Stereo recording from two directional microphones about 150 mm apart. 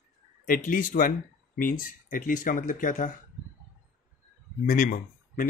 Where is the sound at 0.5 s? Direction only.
65° left (ahead or behind).